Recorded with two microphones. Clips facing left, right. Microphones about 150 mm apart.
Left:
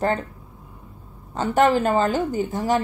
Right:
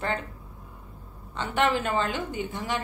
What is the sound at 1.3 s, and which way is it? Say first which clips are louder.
A woman's voice: left 7 dB; 40° left (ahead or behind).